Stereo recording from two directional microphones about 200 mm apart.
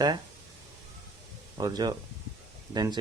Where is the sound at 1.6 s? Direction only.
20° right (ahead or behind).